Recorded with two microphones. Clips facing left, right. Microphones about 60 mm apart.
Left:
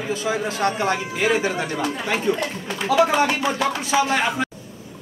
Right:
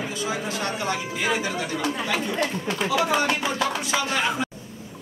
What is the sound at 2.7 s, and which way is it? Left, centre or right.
Speech, centre.